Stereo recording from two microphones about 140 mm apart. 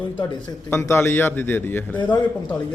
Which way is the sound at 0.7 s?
15° left (ahead or behind).